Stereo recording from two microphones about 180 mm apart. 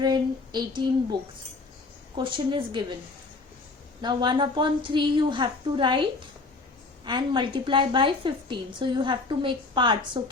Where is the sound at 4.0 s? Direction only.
25° right (ahead or behind).